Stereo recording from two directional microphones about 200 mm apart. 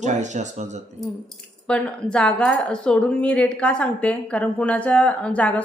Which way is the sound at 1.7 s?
5° left (ahead or behind).